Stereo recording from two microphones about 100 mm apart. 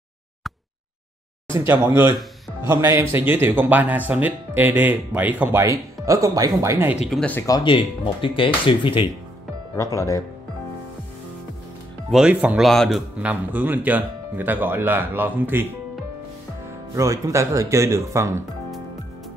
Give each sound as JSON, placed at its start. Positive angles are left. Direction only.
{"t": 1.5, "sound": "speech", "side_deg": -30}
{"t": 5.6, "sound": "speech", "side_deg": -30}
{"t": 7.6, "sound": "speech", "side_deg": 55}
{"t": 9.9, "sound": "speech", "side_deg": 35}
{"t": 12.1, "sound": "a man's voice", "side_deg": -5}
{"t": 13.2, "sound": "speech", "side_deg": -15}
{"t": 16.9, "sound": "speech", "side_deg": -30}